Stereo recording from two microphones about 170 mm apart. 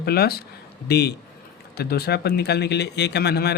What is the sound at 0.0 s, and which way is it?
Speech, 70° left (ahead or behind).